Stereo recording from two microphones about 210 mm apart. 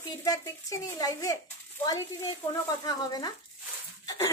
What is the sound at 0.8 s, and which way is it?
A woman's voice, 15° left (ahead or behind).